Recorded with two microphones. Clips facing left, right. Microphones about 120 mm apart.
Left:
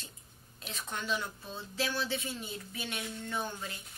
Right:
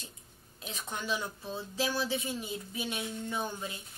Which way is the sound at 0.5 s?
15° right (ahead or behind).